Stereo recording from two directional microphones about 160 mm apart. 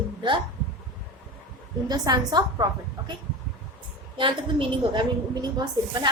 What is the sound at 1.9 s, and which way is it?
Speech, 25° right (ahead or behind).